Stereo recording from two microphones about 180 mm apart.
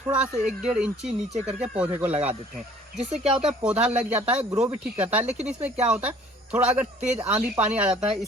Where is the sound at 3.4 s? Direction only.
5° right (ahead or behind).